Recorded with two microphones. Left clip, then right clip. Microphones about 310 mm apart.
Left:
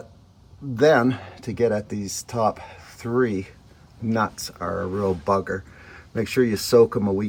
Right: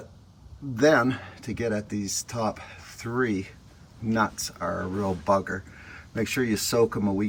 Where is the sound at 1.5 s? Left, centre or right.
Centre.